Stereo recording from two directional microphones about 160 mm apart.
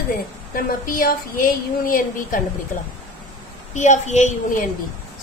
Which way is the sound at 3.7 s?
50° left (ahead or behind).